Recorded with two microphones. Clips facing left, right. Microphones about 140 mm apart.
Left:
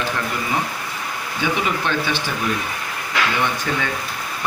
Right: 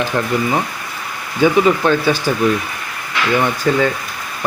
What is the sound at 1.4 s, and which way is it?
Speech, 40° right (ahead or behind).